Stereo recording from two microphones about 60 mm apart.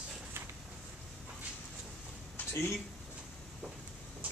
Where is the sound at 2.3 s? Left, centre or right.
Left.